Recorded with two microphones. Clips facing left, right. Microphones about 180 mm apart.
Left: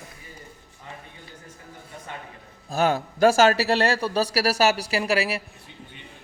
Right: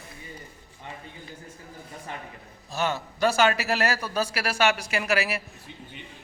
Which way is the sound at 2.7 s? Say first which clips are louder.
Left 6 dB; 55° left (ahead or behind).